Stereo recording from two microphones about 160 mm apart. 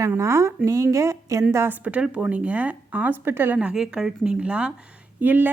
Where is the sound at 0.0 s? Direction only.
20° right (ahead or behind).